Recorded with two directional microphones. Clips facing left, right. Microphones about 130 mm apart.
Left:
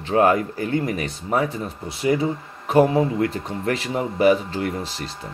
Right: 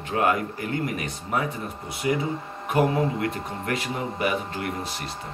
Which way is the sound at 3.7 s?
30° left (ahead or behind).